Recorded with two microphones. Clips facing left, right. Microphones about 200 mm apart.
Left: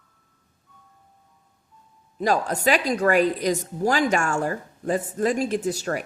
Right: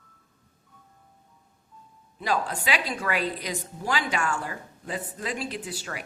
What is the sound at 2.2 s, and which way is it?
A woman's voice, 45° left (ahead or behind).